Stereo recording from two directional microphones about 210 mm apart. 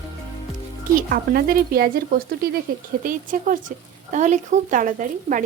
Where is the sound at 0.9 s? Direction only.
45° right (ahead or behind).